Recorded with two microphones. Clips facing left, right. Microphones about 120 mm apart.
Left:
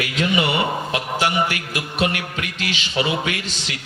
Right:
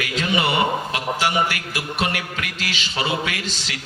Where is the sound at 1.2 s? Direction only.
20° left (ahead or behind).